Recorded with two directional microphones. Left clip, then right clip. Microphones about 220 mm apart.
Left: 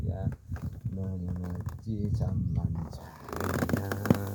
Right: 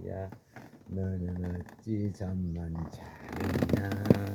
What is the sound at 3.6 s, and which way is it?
Music, 10° left (ahead or behind).